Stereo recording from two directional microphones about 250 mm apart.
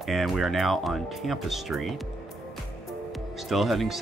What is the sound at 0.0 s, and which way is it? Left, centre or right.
Speech, centre.